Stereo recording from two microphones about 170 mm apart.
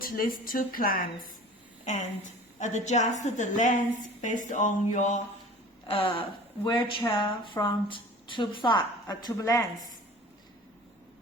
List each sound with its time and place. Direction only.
0.0 s speech: 55° left (ahead or behind)
1.8 s a woman's voice: 45° left (ahead or behind)
5.8 s a sound: 30° left (ahead or behind)
6.7 s speech: 30° left (ahead or behind)